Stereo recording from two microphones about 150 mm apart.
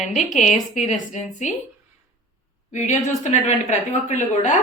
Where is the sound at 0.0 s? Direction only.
50° left (ahead or behind).